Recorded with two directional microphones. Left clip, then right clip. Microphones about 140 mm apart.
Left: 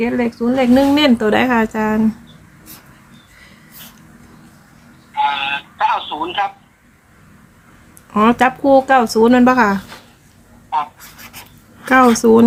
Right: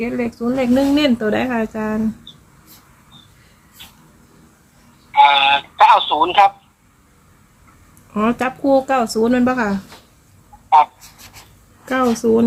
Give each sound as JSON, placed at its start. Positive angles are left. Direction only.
{"t": 0.0, "sound": "speech", "side_deg": 20}
{"t": 0.3, "sound": "speech", "side_deg": 5}
{"t": 5.1, "sound": "telephone", "side_deg": -90}
{"t": 8.1, "sound": "speech", "side_deg": 30}
{"t": 8.7, "sound": "speech", "side_deg": 10}
{"t": 11.9, "sound": "speech", "side_deg": 45}